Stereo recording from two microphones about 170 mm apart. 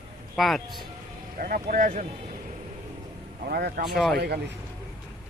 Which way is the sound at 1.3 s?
55° right (ahead or behind).